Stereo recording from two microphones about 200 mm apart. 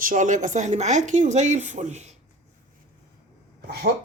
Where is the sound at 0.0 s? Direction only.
40° right (ahead or behind).